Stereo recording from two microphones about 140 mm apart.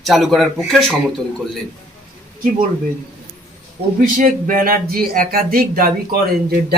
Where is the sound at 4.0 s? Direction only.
75° right (ahead or behind).